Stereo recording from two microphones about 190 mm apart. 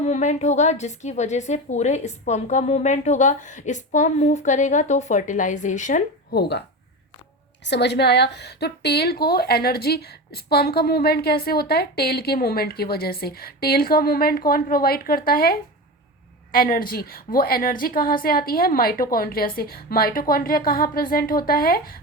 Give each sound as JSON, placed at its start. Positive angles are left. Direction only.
{"t": 0.0, "sound": "a woman's voice", "side_deg": 35}
{"t": 6.3, "sound": "a woman's voice", "side_deg": 55}
{"t": 7.6, "sound": "a woman's voice", "side_deg": 65}